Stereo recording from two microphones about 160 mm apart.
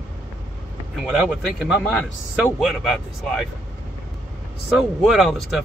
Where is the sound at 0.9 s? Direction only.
Centre (ahead or behind).